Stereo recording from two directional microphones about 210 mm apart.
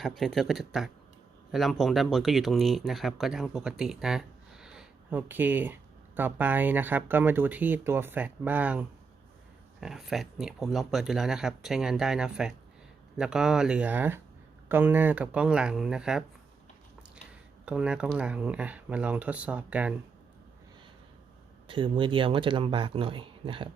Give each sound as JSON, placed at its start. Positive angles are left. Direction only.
{"t": 0.0, "sound": "speech", "side_deg": 0}
{"t": 17.7, "sound": "speech", "side_deg": -5}
{"t": 21.7, "sound": "speech", "side_deg": -25}